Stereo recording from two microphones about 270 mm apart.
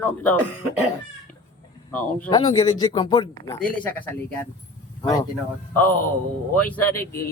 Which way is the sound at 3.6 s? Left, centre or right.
Centre.